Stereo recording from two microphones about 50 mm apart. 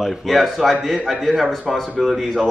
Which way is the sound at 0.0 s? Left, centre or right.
Centre.